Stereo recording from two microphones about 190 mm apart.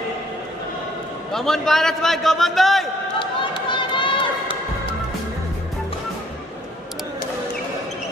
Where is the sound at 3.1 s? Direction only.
25° left (ahead or behind).